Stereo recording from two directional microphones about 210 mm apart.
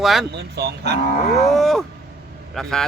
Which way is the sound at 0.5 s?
50° right (ahead or behind).